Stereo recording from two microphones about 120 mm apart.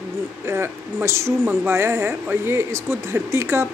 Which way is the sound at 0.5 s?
20° right (ahead or behind).